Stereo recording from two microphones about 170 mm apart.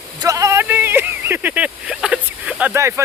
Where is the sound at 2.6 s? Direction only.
15° right (ahead or behind).